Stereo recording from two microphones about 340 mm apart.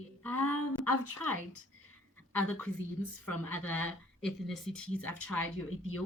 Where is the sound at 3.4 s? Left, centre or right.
Centre.